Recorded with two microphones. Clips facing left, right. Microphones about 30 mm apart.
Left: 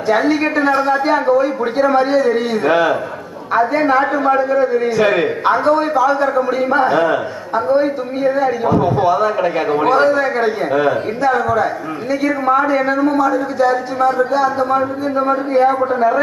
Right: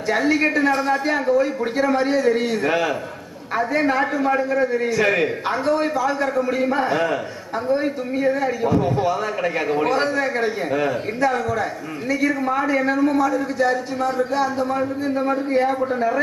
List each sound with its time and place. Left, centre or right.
0.1 s a man's voice: centre
2.6 s a man's voice: left
3.7 s a man's voice: centre; by 9.1 s left
9.1 s a man's voice: centre
12.6 s a man's voice: centre